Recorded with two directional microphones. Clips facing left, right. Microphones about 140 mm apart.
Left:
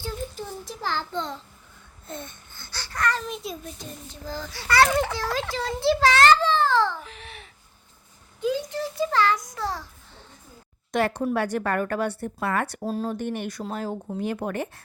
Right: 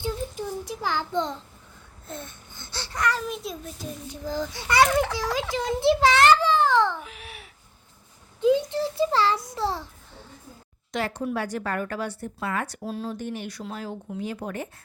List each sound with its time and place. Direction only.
0.0 s child singing: 15° right (ahead or behind)
2.0 s a child's voice: centre (ahead or behind)
2.5 s baby cry: 20° right (ahead or behind)
3.0 s a child's voice: 10° right (ahead or behind)
4.3 s a child's voice: 15° right (ahead or behind)
4.9 s a child's voice: centre (ahead or behind)
5.1 s a child's voice: 15° right (ahead or behind)
7.0 s a sound: 5° right (ahead or behind)
8.4 s a child's voice: 25° right (ahead or behind)
10.9 s a woman's voice: 55° left (ahead or behind)
12.8 s speech: 45° left (ahead or behind)
14.2 s a woman's voice: 60° left (ahead or behind)